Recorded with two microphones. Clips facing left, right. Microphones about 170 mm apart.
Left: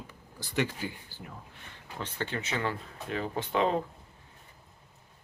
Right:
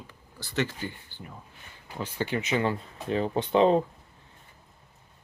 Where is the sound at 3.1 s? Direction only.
25° right (ahead or behind).